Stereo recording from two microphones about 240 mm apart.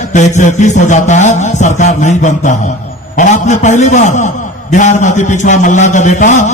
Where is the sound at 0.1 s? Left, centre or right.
Left.